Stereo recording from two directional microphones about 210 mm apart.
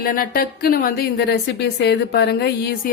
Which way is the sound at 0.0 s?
45° left (ahead or behind).